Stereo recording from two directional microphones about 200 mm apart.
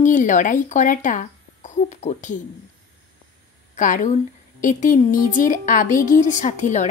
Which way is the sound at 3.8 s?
40° left (ahead or behind).